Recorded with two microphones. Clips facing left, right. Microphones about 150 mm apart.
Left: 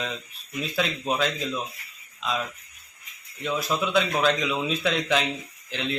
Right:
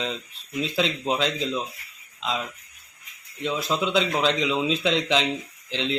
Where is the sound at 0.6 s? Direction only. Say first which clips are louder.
Right 2 dB; 20° right (ahead or behind).